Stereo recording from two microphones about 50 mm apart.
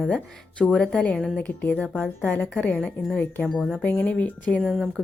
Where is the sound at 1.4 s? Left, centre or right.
Left.